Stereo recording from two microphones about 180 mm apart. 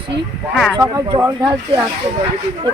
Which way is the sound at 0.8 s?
20° right (ahead or behind).